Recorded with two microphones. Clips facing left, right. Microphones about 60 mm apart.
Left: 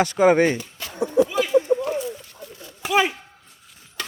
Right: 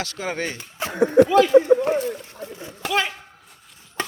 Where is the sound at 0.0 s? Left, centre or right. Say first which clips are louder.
Left 11 dB; left.